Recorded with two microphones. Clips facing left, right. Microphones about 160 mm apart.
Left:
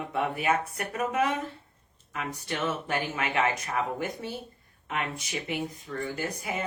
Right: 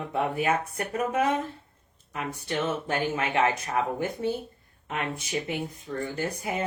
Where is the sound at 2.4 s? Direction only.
30° right (ahead or behind).